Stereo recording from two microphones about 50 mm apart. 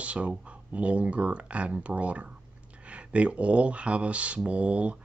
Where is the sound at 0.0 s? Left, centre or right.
Right.